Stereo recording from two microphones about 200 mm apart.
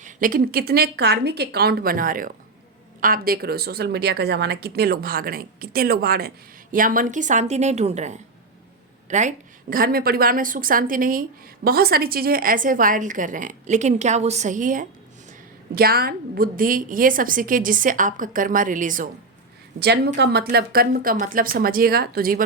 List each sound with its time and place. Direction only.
0.0 s a woman's voice: 45° right (ahead or behind)
20.1 s a woman's voice: 55° right (ahead or behind)